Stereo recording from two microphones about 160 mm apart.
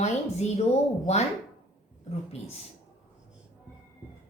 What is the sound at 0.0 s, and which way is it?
A woman's voice, 45° left (ahead or behind).